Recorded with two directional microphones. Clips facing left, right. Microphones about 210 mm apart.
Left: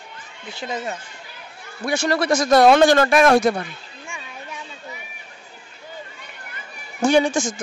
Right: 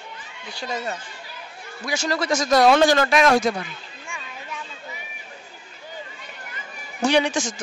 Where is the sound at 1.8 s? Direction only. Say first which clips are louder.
Left 4 dB; 60° left (ahead or behind).